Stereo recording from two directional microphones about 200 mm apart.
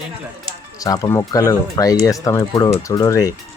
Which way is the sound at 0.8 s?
15° left (ahead or behind).